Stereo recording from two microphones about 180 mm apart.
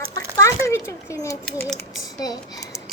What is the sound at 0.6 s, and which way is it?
A child's voice, 15° left (ahead or behind).